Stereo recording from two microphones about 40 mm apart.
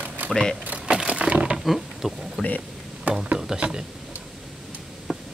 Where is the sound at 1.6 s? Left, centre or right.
Centre.